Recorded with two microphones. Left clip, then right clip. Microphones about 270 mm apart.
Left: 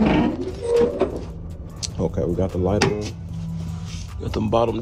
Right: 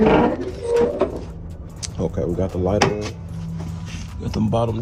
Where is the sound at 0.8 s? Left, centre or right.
Centre.